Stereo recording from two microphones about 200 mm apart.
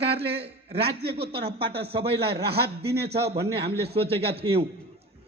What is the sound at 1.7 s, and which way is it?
Speech, 30° right (ahead or behind).